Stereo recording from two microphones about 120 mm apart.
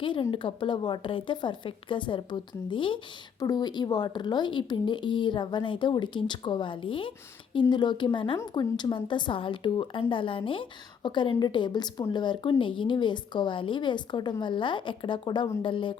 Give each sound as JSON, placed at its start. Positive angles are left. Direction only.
{"t": 0.0, "sound": "speech", "side_deg": 45}